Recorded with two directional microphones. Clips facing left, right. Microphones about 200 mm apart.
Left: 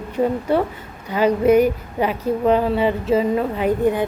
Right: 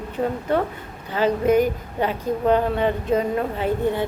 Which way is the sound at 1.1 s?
10° left (ahead or behind).